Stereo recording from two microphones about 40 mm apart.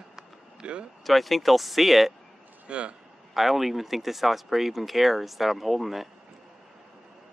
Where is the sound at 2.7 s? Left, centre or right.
Right.